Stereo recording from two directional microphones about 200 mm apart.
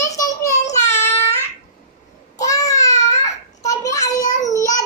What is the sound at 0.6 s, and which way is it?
Child singing, 35° left (ahead or behind).